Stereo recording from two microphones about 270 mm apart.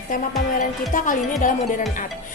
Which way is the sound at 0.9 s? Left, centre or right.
Left.